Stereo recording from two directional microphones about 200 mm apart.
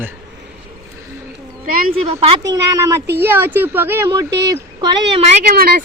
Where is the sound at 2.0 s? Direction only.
15° right (ahead or behind).